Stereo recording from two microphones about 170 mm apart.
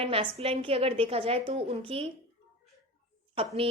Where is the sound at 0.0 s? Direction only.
35° right (ahead or behind).